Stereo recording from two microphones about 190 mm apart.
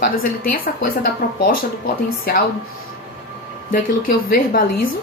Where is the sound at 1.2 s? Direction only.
50° left (ahead or behind).